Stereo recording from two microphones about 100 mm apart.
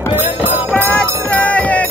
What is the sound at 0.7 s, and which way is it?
Music, 15° left (ahead or behind).